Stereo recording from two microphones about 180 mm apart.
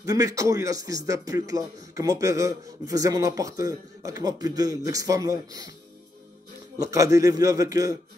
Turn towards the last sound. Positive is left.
turn(degrees=-20)  # may be behind; listen again after turning